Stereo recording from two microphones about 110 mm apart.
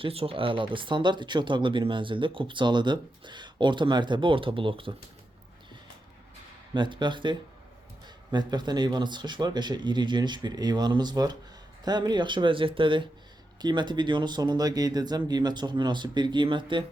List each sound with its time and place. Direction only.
0.0 s speech: 60° right (ahead or behind)
6.7 s speech: 45° right (ahead or behind)